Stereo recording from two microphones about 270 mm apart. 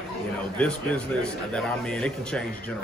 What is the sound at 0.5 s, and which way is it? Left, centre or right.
A man's voice, centre.